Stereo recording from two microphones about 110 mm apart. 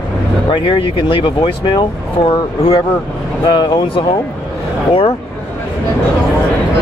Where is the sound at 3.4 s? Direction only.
45° left (ahead or behind).